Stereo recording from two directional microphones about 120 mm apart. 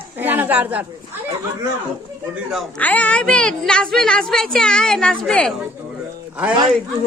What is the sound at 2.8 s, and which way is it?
A woman's voice, 10° left (ahead or behind).